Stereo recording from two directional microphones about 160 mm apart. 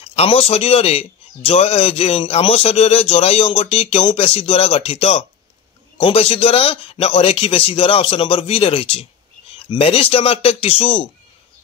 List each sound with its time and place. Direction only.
0.1 s a man's voice: 40° left (ahead or behind)